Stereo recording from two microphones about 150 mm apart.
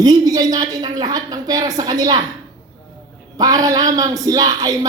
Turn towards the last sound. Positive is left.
turn(degrees=-25)  # may be behind; listen again after turning